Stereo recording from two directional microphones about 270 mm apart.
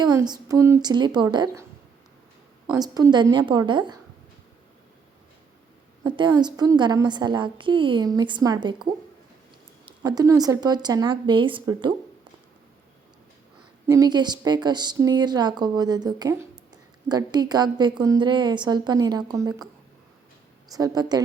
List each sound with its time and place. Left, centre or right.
0.0 s a woman's voice: centre
2.7 s a woman's voice: centre
6.0 s a woman's voice: centre
13.8 s a woman's voice: centre
20.7 s a woman's voice: centre